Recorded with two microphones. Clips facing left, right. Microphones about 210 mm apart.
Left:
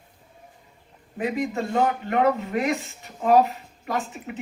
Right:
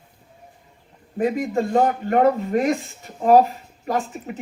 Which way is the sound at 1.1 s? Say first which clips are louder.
Right 5 dB; 45° right (ahead or behind).